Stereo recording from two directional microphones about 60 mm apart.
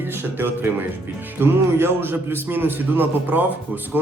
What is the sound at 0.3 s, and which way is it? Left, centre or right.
A man's voice, right.